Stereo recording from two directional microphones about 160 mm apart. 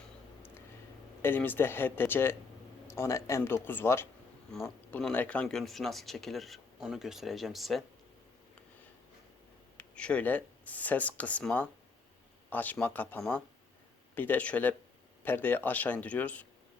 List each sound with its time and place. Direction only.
1.2 s speech: 10° left (ahead or behind)
9.7 s speech: 5° left (ahead or behind)